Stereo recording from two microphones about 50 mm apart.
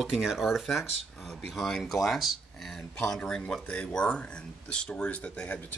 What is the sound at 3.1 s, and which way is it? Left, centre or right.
Speech, centre.